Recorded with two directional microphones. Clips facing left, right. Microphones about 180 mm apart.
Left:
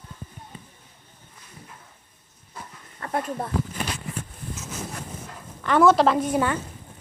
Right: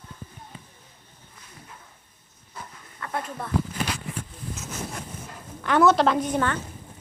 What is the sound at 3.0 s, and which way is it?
Speech, 35° left (ahead or behind).